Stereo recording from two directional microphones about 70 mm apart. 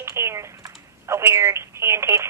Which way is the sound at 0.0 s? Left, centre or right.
Right.